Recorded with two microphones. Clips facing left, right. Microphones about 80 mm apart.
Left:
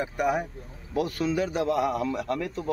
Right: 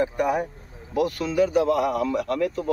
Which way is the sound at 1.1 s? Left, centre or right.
Left.